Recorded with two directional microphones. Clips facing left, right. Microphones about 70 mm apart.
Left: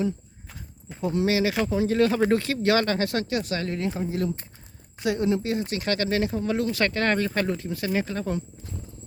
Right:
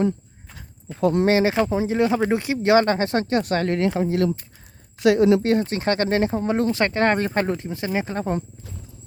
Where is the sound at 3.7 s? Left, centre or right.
Right.